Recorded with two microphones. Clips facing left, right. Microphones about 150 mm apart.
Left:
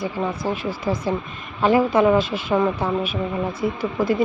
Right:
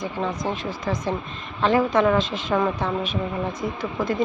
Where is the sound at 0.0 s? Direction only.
10° left (ahead or behind).